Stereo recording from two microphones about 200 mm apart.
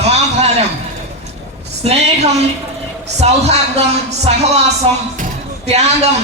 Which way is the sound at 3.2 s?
30° right (ahead or behind).